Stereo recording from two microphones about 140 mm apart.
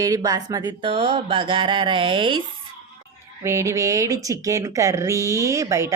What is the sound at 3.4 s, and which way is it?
Speech, 20° right (ahead or behind).